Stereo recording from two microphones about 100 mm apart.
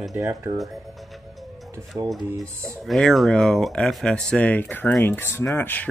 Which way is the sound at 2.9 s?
Centre (ahead or behind).